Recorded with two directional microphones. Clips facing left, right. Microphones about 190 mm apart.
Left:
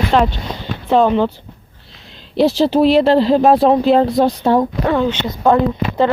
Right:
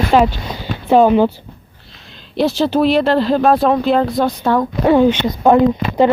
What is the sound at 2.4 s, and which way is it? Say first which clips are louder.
Speech: left 2 dB; 30° left (ahead or behind).